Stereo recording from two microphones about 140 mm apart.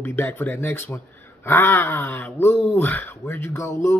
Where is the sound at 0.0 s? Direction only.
15° left (ahead or behind).